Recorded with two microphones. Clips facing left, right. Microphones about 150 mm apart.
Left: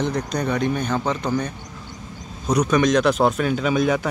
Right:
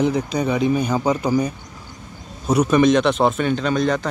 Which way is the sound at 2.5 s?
5° right (ahead or behind).